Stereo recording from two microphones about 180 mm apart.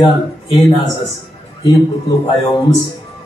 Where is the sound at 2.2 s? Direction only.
25° left (ahead or behind).